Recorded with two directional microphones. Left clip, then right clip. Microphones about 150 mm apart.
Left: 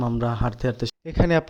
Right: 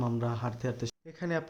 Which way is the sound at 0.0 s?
45° left (ahead or behind).